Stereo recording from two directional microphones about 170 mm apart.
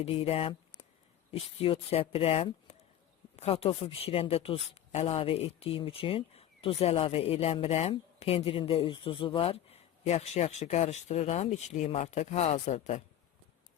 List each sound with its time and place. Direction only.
0.0 s speech: 35° left (ahead or behind)